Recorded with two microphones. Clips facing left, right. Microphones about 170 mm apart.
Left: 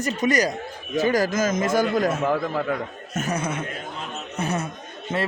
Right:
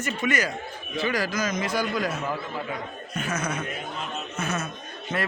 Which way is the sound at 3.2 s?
40° left (ahead or behind).